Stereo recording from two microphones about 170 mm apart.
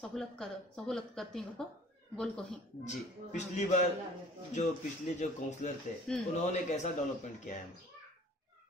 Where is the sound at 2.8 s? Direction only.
40° left (ahead or behind).